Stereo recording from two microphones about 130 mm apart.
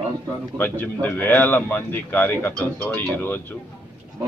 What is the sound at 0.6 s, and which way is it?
Speech, 15° left (ahead or behind).